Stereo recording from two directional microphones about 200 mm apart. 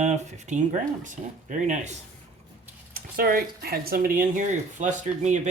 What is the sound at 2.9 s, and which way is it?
Speech, 45° right (ahead or behind).